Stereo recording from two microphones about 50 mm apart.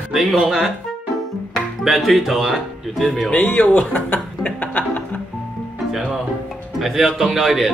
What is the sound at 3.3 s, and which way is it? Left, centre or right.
Speech, left.